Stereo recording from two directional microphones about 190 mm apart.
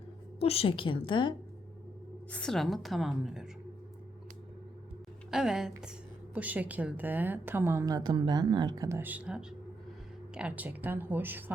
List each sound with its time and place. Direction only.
0.3 s a woman's voice: 30° left (ahead or behind)
2.3 s a woman's voice: 5° left (ahead or behind)
5.3 s a woman's voice: 5° right (ahead or behind)